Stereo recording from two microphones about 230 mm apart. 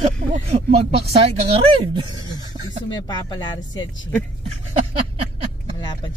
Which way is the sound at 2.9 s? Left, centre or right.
Centre.